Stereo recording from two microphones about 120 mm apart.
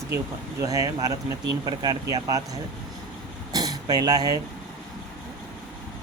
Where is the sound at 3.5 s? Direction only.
30° right (ahead or behind).